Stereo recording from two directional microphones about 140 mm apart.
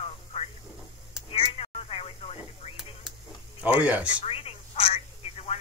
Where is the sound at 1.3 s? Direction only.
45° left (ahead or behind).